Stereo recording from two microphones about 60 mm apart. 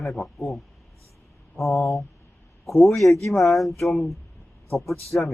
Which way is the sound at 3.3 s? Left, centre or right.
Centre.